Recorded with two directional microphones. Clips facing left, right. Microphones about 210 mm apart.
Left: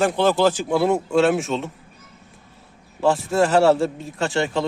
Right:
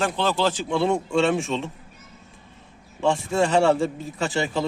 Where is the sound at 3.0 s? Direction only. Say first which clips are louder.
Left 3 dB; 5° left (ahead or behind).